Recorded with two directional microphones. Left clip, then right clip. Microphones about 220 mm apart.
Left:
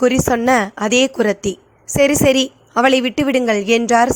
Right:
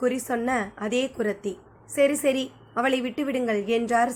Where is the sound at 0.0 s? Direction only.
40° left (ahead or behind).